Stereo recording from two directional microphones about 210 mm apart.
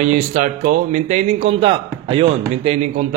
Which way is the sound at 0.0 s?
35° right (ahead or behind).